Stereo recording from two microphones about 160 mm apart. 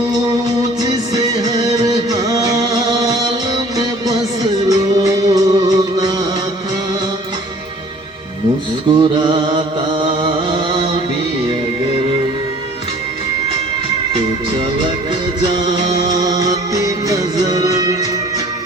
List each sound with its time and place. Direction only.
0.8 s music: 25° right (ahead or behind)
8.9 s a sound: 30° right (ahead or behind)
15.5 s music: 25° right (ahead or behind)